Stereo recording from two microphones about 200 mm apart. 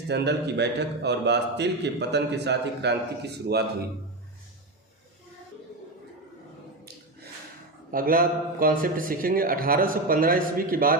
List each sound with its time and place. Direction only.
0.1 s a man's voice: 60° right (ahead or behind)
7.9 s a man's voice: 45° right (ahead or behind)